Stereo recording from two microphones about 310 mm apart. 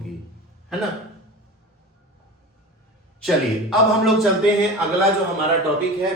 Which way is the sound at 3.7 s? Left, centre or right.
Centre.